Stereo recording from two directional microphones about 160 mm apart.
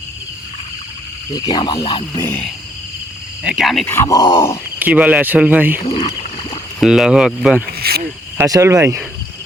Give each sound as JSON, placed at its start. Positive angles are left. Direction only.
{"t": 1.4, "sound": "speech", "side_deg": 25}
{"t": 2.2, "sound": "speech", "side_deg": 10}
{"t": 3.4, "sound": "speech", "side_deg": -5}
{"t": 3.8, "sound": "speech", "side_deg": 20}
{"t": 4.8, "sound": "speech", "side_deg": -10}
{"t": 6.0, "sound": "rowboat", "side_deg": 30}
{"t": 6.7, "sound": "speech", "side_deg": 0}
{"t": 7.7, "sound": "cricket", "side_deg": -70}
{"t": 8.4, "sound": "speech", "side_deg": -20}